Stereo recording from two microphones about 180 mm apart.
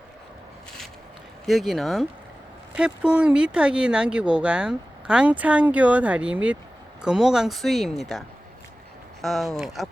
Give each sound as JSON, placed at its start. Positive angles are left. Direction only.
{"t": 1.5, "sound": "speech", "side_deg": 0}
{"t": 9.2, "sound": "speech", "side_deg": 0}